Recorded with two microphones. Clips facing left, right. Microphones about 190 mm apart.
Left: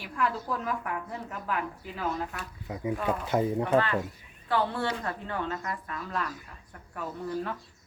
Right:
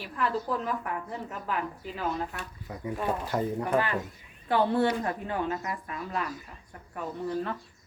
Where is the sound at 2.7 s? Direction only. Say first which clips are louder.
Left 1 dB; 15° left (ahead or behind).